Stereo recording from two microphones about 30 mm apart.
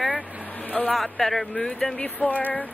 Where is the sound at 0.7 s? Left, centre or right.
Left.